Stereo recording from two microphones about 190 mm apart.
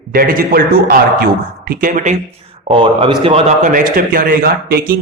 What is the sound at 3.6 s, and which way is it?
A man's voice, 45° right (ahead or behind).